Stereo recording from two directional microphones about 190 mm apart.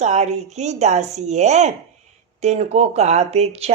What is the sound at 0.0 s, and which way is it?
Speech, 35° right (ahead or behind).